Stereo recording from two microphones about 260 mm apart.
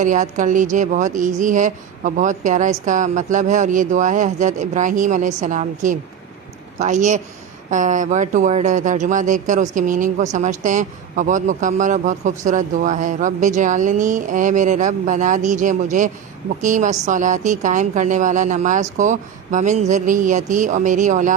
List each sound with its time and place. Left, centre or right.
0.0 s a man's voice: right